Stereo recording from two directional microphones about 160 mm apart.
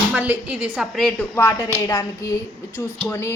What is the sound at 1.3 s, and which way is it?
Speech, 15° left (ahead or behind).